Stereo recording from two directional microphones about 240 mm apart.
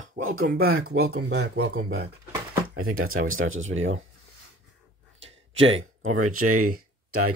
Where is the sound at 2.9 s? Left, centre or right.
Right.